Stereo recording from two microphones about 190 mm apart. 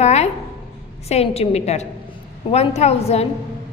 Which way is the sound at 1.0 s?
35° left (ahead or behind).